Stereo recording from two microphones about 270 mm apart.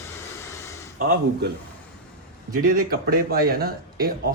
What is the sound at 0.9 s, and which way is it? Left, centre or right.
Speech, right.